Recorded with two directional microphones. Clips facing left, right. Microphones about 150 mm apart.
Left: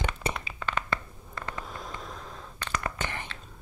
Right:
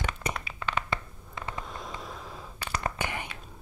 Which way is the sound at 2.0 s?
5° right (ahead or behind).